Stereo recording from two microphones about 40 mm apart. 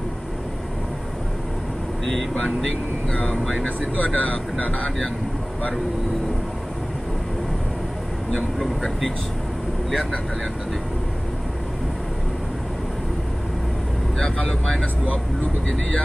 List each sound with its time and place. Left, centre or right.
2.0 s vehicle: centre
3.1 s speech: left
3.3 s speech: centre
3.6 s speech: left
8.5 s speech: centre
14.2 s speech: left